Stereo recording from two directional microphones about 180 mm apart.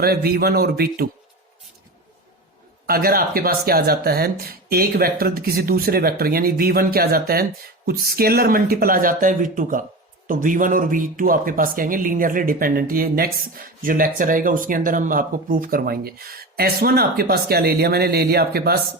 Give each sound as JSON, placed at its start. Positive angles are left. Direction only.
{"t": 0.0, "sound": "speech", "side_deg": -60}
{"t": 2.8, "sound": "speech", "side_deg": -55}